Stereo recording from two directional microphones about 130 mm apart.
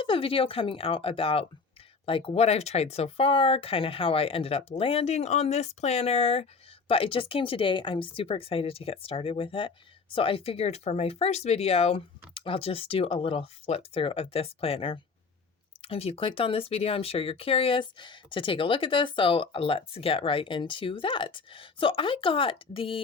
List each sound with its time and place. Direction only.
0.0 s speech: 45° left (ahead or behind)